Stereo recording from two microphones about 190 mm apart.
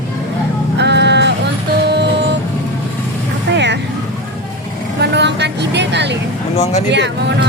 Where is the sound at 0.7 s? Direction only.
65° right (ahead or behind).